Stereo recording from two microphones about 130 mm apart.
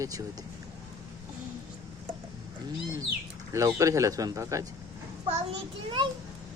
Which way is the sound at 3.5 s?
25° right (ahead or behind).